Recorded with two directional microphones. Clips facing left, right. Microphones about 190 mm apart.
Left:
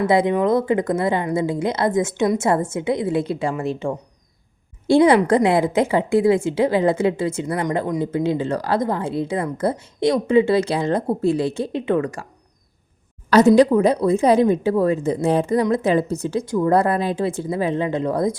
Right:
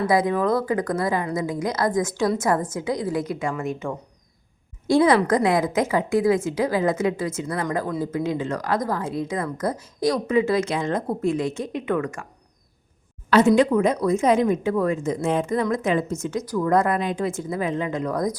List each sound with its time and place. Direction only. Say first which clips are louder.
0.1 s a woman's voice: left 3 dB; 25° left (ahead or behind)
13.3 s speech: left 4 dB; 40° left (ahead or behind)